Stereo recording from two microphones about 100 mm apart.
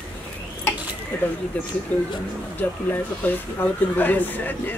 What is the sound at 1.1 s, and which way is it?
Speech, 15° left (ahead or behind).